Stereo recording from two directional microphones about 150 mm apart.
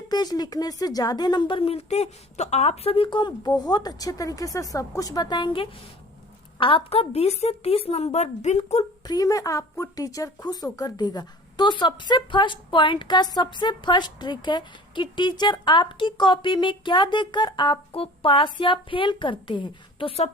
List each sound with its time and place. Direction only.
0.1 s a woman's voice: 25° left (ahead or behind); by 8.8 s 50° left (ahead or behind)
9.0 s a woman's voice: 25° left (ahead or behind); by 20.3 s 40° left (ahead or behind)